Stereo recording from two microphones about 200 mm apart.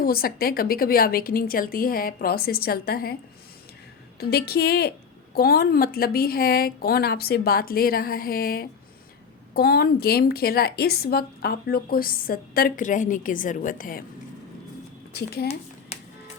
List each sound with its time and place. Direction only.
0.0 s a woman's voice: 50° left (ahead or behind)
4.2 s a woman's voice: 50° left (ahead or behind)
15.1 s speech: 55° left (ahead or behind)